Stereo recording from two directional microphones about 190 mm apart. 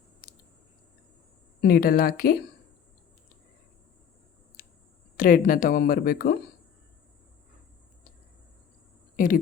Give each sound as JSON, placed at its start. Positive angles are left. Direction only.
{"t": 1.6, "sound": "speech", "side_deg": 50}
{"t": 4.6, "sound": "clicking", "side_deg": 50}
{"t": 5.1, "sound": "speech", "side_deg": 50}
{"t": 9.1, "sound": "speech", "side_deg": 45}